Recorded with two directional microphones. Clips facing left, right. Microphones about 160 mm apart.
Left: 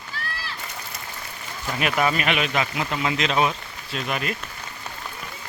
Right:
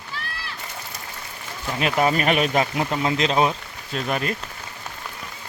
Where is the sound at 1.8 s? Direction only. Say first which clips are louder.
Right 2 dB; 30° right (ahead or behind).